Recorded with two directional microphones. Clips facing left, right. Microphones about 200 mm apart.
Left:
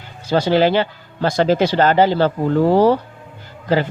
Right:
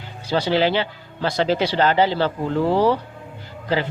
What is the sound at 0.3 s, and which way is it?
Speech, 45° left (ahead or behind).